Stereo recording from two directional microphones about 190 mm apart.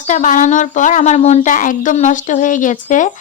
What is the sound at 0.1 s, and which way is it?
A woman's voice, 45° left (ahead or behind).